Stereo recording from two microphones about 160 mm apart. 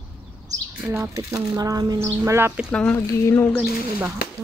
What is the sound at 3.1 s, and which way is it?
Speech, 20° left (ahead or behind).